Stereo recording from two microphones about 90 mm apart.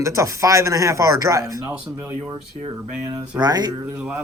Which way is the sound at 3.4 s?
50° right (ahead or behind).